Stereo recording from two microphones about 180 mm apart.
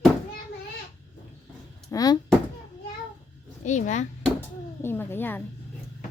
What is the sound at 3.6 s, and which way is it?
Speech, 40° left (ahead or behind).